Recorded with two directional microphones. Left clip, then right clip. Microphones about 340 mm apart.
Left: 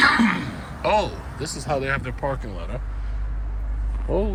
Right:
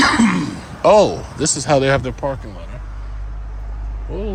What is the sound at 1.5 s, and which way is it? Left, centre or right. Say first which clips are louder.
Speech: right 10 dB; right.